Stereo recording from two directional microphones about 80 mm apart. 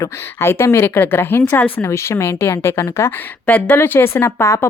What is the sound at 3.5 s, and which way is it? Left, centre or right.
Speech, left.